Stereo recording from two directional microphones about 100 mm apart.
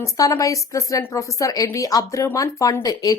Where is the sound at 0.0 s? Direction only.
35° left (ahead or behind).